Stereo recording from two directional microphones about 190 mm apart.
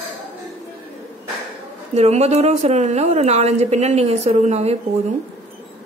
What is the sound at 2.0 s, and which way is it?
A woman's voice, 35° right (ahead or behind).